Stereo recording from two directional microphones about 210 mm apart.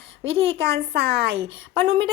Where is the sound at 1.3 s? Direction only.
25° right (ahead or behind).